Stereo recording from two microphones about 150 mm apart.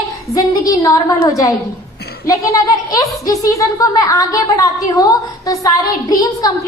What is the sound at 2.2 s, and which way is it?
A woman's voice, 20° left (ahead or behind).